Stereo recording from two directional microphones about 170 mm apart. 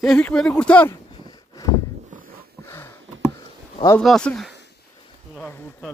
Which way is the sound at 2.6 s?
15° left (ahead or behind).